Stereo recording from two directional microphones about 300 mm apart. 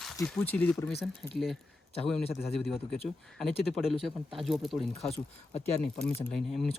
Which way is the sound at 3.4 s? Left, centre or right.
Centre.